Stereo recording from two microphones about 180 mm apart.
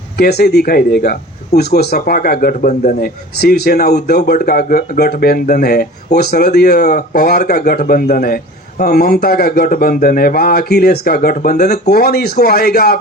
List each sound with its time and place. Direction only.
0.2 s speech: 65° left (ahead or behind); by 3.1 s 45° left (ahead or behind)
3.4 s speech: 60° left (ahead or behind)